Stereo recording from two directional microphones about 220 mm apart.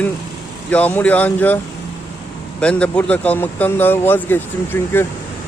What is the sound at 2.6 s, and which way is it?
Speech, 5° left (ahead or behind).